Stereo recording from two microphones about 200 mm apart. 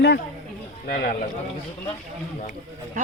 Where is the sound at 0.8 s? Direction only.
50° left (ahead or behind).